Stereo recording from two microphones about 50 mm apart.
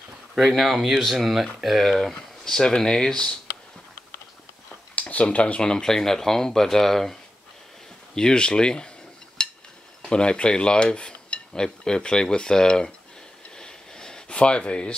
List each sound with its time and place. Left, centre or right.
0.4 s speech: centre
2.1 s cutlery: centre
5.0 s cutlery: left
9.4 s a sound: centre
10.0 s cutlery: centre
13.6 s a sound: centre